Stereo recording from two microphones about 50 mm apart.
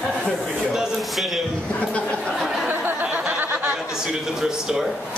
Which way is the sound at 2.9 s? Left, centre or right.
Right.